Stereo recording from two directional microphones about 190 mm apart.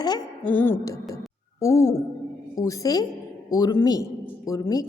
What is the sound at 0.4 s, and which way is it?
A woman's voice, 10° left (ahead or behind).